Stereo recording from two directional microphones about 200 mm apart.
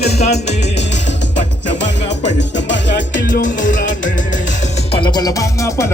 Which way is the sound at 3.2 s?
40° left (ahead or behind).